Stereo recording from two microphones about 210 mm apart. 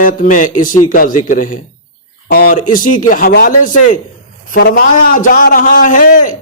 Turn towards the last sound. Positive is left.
turn(degrees=40)  # may be behind; listen again after turning